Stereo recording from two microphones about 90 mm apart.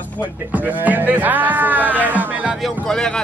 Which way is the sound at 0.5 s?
20° right (ahead or behind).